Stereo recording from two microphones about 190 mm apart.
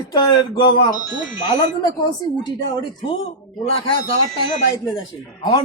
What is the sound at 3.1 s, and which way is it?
Speech, 30° left (ahead or behind).